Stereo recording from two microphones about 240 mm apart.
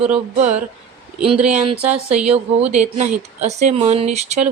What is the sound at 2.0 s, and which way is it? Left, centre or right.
Speech, centre.